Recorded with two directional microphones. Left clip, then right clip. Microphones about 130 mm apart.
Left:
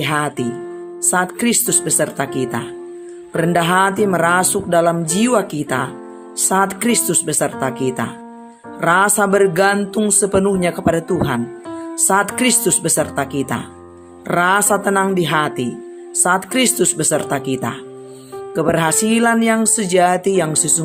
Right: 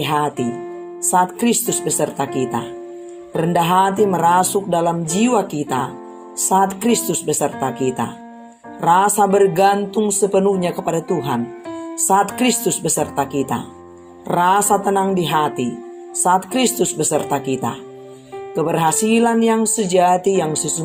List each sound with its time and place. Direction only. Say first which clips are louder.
0.0 s speech: even; 40° left (ahead or behind)
1.4 s speech: left 1 dB; 45° left (ahead or behind)